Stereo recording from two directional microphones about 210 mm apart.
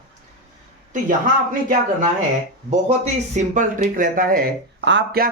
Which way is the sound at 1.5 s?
40° right (ahead or behind).